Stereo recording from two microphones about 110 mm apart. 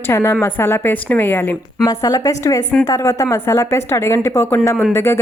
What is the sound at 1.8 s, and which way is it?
A woman's voice, 35° left (ahead or behind).